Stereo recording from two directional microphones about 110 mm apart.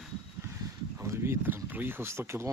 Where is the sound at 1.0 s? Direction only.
25° right (ahead or behind).